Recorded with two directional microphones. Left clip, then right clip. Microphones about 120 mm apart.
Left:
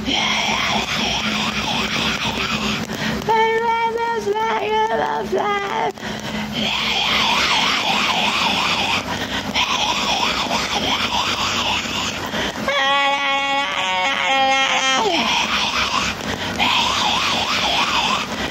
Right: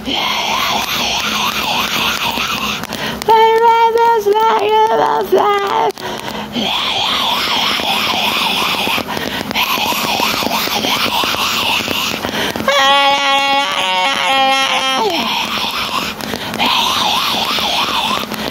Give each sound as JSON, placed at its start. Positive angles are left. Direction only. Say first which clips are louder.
{"t": 3.3, "sound": "child singing", "louder": "right 8 dB", "side_deg": -30}
{"t": 7.1, "sound": "emergency vehicle", "louder": "right 2 dB", "side_deg": -20}
{"t": 12.6, "sound": "a sound", "louder": "right 7 dB", "side_deg": -30}
{"t": 16.6, "sound": "wail", "louder": "right 4 dB", "side_deg": -25}